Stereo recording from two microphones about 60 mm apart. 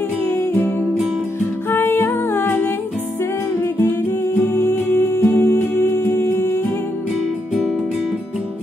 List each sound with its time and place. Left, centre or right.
0.3 s music: left
4.4 s music: left